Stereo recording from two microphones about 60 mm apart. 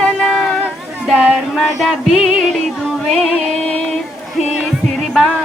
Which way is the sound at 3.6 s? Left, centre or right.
Left.